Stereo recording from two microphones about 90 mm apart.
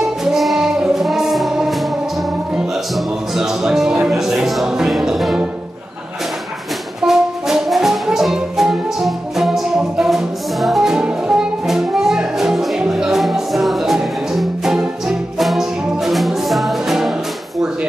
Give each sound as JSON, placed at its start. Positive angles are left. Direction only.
{"t": 0.2, "sound": "music", "side_deg": 0}
{"t": 3.3, "sound": "music", "side_deg": -5}
{"t": 7.0, "sound": "brass instrument", "side_deg": -5}